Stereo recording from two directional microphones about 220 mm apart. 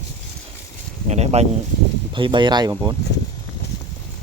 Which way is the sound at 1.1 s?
30° right (ahead or behind).